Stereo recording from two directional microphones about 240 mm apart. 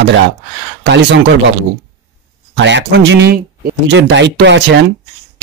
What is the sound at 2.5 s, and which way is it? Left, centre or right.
Speech, right.